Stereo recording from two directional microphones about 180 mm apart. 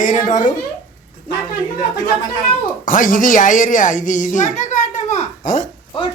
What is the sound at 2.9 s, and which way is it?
A child's voice, 45° left (ahead or behind).